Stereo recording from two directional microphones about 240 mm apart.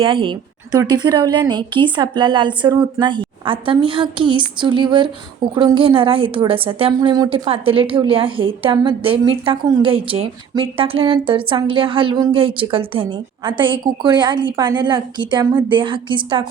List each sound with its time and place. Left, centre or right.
0.0 s a woman's voice: right